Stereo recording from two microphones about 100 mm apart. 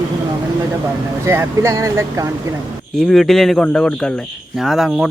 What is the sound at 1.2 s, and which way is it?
Speech, 30° right (ahead or behind).